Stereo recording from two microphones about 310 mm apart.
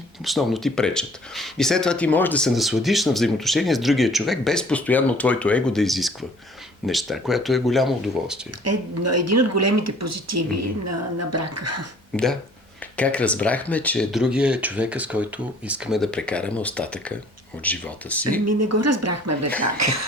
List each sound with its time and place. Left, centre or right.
0.3 s speech: centre
8.6 s speech: right
12.1 s speech: centre
18.4 s speech: right